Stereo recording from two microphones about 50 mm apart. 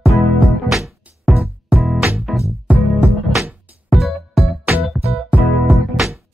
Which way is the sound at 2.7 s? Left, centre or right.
Right.